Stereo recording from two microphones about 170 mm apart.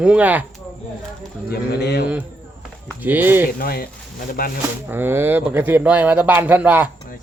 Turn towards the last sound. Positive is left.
turn(degrees=-10)  # may be behind; listen again after turning